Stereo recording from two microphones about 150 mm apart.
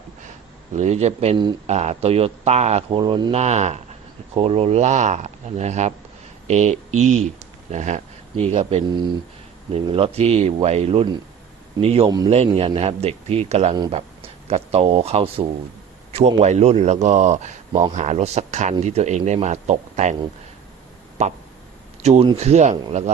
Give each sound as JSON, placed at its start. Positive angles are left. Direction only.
{"t": 0.7, "sound": "speech", "side_deg": -50}
{"t": 3.0, "sound": "speech", "side_deg": -30}
{"t": 3.3, "sound": "speech", "side_deg": -50}
{"t": 21.2, "sound": "speech", "side_deg": -50}